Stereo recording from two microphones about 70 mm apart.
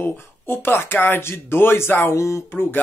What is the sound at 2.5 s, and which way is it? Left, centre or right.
Speech, left.